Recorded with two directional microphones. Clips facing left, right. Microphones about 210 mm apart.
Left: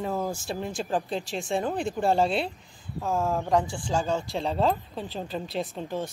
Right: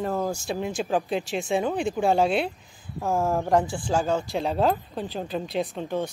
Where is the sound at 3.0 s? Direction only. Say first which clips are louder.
Right 3 dB; 20° right (ahead or behind).